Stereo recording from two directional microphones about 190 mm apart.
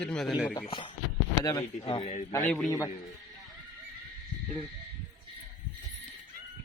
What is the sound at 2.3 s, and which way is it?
Speech, 10° left (ahead or behind).